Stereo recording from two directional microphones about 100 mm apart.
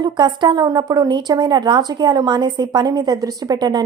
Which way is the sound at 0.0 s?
50° right (ahead or behind).